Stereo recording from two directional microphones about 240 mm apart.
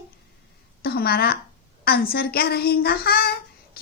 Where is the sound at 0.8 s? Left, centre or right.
Left.